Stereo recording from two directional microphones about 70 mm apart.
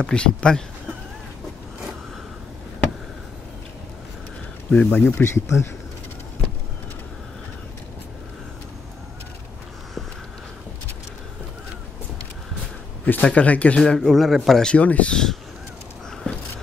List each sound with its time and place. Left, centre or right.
0.0 s speech: centre
4.6 s speech: left
13.0 s speech: centre
13.9 s a man's voice: centre
14.6 s speech: centre
16.3 s a sound: centre